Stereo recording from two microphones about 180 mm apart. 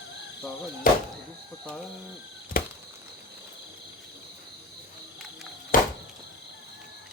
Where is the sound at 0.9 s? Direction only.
50° left (ahead or behind).